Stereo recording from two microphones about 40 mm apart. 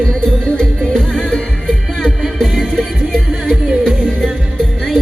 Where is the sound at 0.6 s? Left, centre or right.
Centre.